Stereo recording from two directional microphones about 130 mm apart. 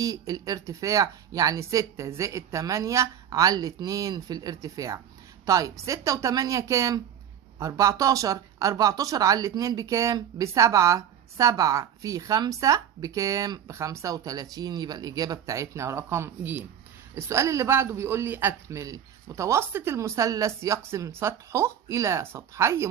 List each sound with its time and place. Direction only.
0.0 s speech: 25° right (ahead or behind)